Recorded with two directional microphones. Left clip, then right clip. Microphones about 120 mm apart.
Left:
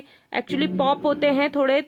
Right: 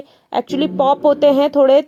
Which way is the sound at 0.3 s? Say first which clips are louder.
Right 6 dB; 20° right (ahead or behind).